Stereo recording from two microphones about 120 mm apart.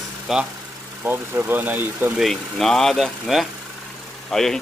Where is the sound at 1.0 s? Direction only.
15° right (ahead or behind).